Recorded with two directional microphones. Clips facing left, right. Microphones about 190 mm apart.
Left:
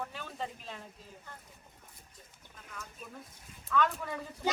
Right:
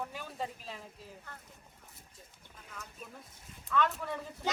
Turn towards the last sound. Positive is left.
turn(degrees=0)  # may be behind; listen again after turning